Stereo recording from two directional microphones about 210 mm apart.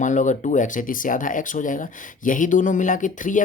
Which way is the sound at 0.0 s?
35° left (ahead or behind).